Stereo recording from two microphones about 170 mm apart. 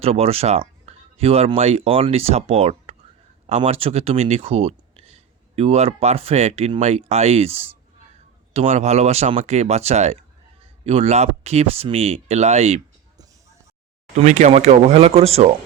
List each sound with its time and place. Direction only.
0.0 s speech: 35° right (ahead or behind)
14.2 s speech: 45° right (ahead or behind)